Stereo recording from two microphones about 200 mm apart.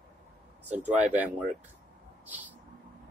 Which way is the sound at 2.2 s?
10° right (ahead or behind).